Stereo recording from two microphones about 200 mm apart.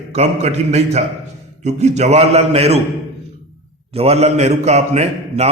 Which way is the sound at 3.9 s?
30° right (ahead or behind).